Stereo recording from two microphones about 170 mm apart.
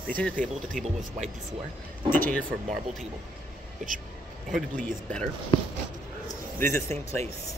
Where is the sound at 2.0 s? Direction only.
10° left (ahead or behind).